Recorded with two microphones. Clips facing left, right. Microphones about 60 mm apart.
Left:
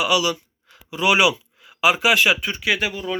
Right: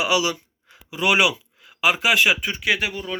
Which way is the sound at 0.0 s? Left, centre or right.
Right.